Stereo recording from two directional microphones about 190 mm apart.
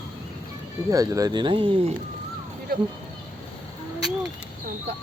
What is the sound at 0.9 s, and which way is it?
Speech, 15° right (ahead or behind).